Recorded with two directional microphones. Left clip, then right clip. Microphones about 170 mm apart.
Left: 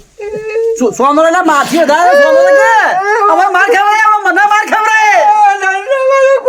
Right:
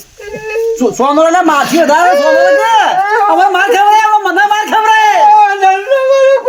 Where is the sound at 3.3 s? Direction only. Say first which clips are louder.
Left 3 dB; 15° left (ahead or behind).